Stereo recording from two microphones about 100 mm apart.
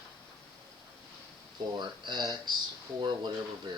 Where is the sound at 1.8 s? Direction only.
50° right (ahead or behind).